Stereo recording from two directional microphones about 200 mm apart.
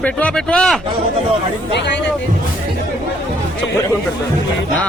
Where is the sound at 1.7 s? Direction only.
60° left (ahead or behind).